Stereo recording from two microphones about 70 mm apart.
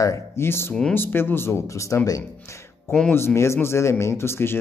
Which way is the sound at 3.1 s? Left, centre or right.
Left.